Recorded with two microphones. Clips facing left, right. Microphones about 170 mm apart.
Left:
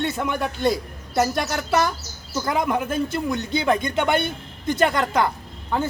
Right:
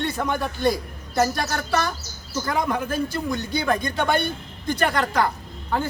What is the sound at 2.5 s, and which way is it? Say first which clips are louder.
Speech: left 2 dB; 20° left (ahead or behind).